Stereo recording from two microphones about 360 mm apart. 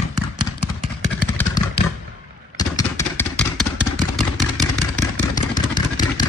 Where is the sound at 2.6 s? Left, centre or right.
Centre.